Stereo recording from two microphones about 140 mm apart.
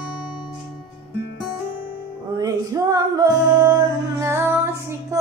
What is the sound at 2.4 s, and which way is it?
Music, 25° right (ahead or behind).